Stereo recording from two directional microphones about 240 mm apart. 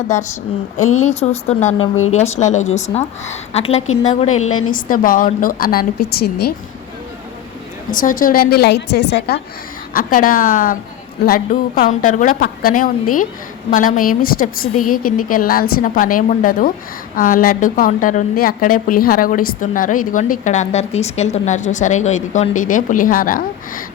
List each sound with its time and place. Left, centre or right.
0.8 s a woman's voice: left
1.0 s a woman's voice: left
4.3 s a woman's voice: left
4.7 s a woman's voice: left
7.9 s a woman's voice: left